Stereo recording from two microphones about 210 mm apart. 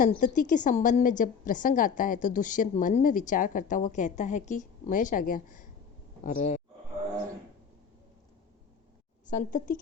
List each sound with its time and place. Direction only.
0.0 s a woman's voice: 40° left (ahead or behind)
9.2 s a woman's voice: 40° left (ahead or behind)